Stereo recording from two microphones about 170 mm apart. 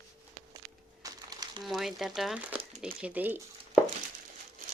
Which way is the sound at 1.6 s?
Centre (ahead or behind).